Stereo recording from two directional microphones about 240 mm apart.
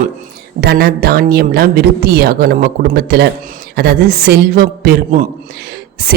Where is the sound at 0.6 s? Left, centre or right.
Right.